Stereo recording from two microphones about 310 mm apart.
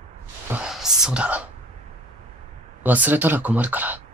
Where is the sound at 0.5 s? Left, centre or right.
Centre.